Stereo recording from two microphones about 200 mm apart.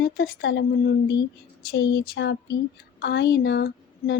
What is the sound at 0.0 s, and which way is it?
Speech, 55° left (ahead or behind).